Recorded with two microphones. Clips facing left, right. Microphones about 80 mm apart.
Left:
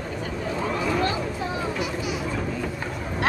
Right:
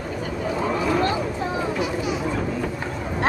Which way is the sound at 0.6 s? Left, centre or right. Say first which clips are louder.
Right 3 dB; centre.